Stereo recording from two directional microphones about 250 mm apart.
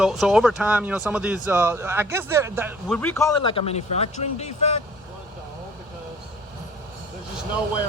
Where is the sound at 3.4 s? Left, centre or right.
Left.